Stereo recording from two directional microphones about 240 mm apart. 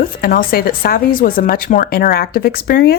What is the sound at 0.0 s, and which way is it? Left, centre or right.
Speech, left.